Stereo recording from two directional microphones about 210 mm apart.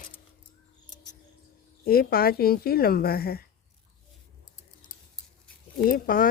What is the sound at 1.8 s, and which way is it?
A woman's voice, 45° left (ahead or behind).